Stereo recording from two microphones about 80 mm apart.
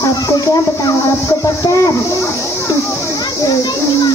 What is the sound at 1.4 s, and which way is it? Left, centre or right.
Child singing, left.